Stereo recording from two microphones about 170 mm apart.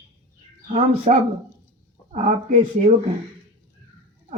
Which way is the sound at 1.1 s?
45° right (ahead or behind).